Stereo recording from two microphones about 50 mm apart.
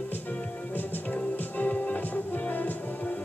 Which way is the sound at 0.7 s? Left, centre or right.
Left.